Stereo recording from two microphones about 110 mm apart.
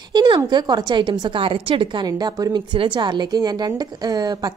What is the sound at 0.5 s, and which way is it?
A woman's voice, 40° right (ahead or behind).